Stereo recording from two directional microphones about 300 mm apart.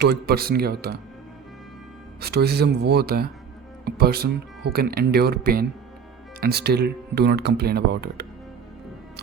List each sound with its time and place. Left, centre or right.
0.0 s speech: right
2.2 s speech: right